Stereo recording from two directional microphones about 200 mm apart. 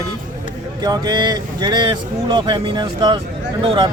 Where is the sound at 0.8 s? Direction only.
20° right (ahead or behind).